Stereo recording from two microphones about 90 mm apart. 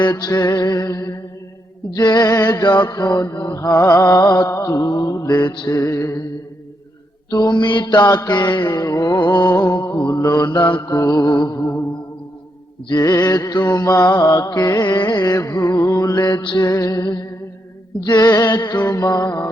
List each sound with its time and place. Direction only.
0.0 s mantra: 50° left (ahead or behind)
2.0 s mantra: 50° left (ahead or behind); by 4.8 s 35° left (ahead or behind)
4.8 s mantra: 50° left (ahead or behind)
5.4 s mantra: 55° left (ahead or behind); by 6.1 s 35° left (ahead or behind)
7.3 s mantra: 45° left (ahead or behind)
10.2 s mantra: 40° left (ahead or behind); by 10.8 s 55° left (ahead or behind)
10.8 s mantra: 40° left (ahead or behind)
12.9 s mantra: 40° left (ahead or behind)
16.4 s music: 65° left (ahead or behind)
16.6 s mantra: 45° left (ahead or behind)